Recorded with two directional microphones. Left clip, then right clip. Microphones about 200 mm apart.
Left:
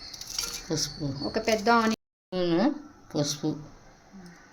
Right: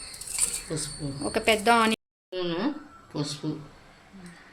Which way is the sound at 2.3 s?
60° left (ahead or behind).